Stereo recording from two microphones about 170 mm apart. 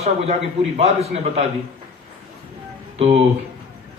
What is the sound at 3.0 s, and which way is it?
Speech, 35° right (ahead or behind).